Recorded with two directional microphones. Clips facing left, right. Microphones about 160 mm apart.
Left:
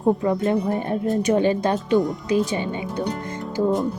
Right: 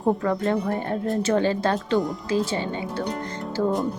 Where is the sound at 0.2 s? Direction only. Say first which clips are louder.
Left 2 dB; 20° left (ahead or behind).